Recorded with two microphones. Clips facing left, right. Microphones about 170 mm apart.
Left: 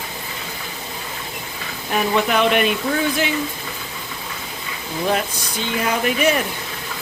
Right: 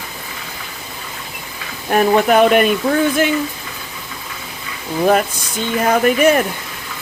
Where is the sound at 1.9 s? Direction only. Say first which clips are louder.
Right 6 dB; 50° right (ahead or behind).